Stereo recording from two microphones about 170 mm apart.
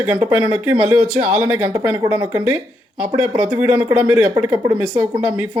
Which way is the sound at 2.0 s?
25° right (ahead or behind).